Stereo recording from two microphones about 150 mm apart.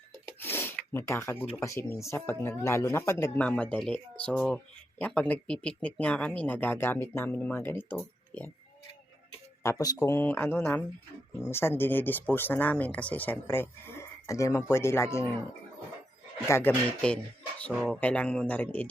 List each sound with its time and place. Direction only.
0.3 s rub: 15° left (ahead or behind)
1.5 s speech: 20° left (ahead or behind)
9.6 s speech: 25° left (ahead or behind)
16.5 s speech: 15° left (ahead or behind)
17.7 s speech: 5° left (ahead or behind)